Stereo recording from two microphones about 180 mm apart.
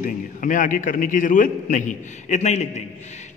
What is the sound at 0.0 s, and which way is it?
A man's voice, 45° left (ahead or behind).